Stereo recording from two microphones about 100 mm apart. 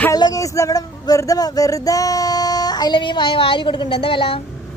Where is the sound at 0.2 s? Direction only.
35° left (ahead or behind); by 4.4 s 60° left (ahead or behind).